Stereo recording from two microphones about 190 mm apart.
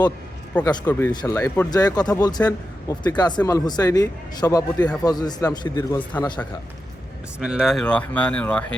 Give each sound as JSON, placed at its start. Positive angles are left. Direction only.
{"t": 0.5, "sound": "speech", "side_deg": 20}
{"t": 7.3, "sound": "speech", "side_deg": -5}